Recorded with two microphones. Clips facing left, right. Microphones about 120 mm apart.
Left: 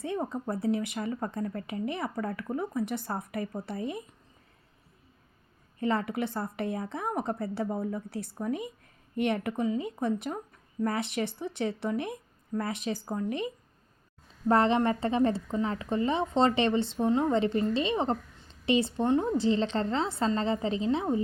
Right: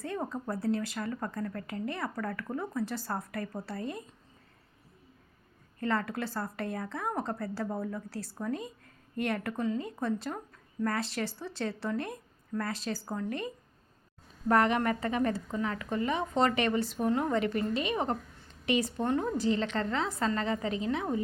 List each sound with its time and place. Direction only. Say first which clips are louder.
0.0 s speech: left 3 dB; 20° left (ahead or behind)
5.8 s speech: left 3 dB; 20° left (ahead or behind)
14.4 s speech: left 2 dB; 30° left (ahead or behind)